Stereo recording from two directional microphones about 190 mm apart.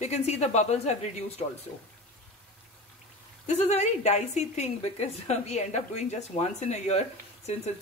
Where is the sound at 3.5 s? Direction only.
35° left (ahead or behind).